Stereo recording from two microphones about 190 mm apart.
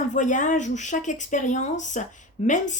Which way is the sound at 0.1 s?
40° left (ahead or behind).